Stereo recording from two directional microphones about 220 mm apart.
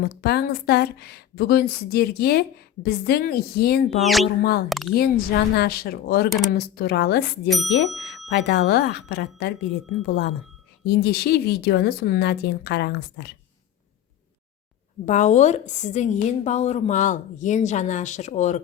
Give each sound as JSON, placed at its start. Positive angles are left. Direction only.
{"t": 0.0, "sound": "a woman's voice", "side_deg": 45}
{"t": 4.0, "sound": "speech", "side_deg": 0}
{"t": 4.9, "sound": "a woman's voice", "side_deg": 45}
{"t": 7.5, "sound": "speech", "side_deg": 0}
{"t": 8.3, "sound": "a woman's voice", "side_deg": 50}
{"t": 10.8, "sound": "a woman's voice", "side_deg": 45}
{"t": 15.0, "sound": "a woman's voice", "side_deg": 35}